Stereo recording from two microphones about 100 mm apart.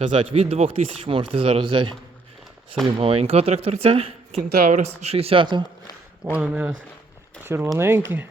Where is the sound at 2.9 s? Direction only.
75° right (ahead or behind).